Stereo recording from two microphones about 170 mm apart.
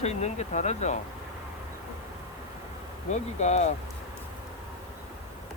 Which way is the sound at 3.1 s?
40° left (ahead or behind).